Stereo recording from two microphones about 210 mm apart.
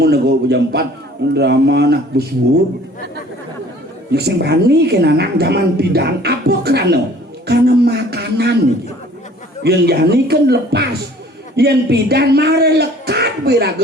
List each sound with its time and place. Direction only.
0.0 s a man's voice: 50° right (ahead or behind)
4.1 s a woman's voice: 50° right (ahead or behind)
9.6 s a woman's voice: 50° right (ahead or behind)